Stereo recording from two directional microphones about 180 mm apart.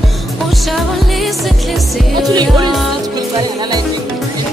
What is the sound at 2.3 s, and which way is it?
Music, 25° right (ahead or behind).